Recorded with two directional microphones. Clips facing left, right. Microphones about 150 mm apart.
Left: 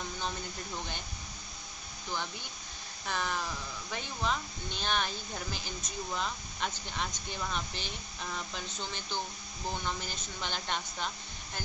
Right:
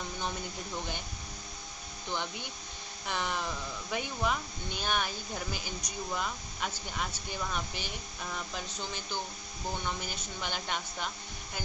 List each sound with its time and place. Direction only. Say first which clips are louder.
3.1 s speech: right 1 dB; 15° right (ahead or behind)